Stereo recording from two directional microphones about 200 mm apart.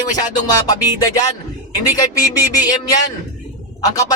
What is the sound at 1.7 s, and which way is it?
A man's voice, 20° left (ahead or behind).